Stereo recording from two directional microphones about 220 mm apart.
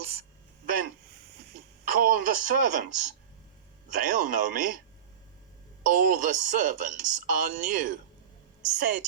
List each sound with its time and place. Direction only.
1.8 s a woman's voice: 40° right (ahead or behind)
5.8 s a woman's voice: 35° right (ahead or behind)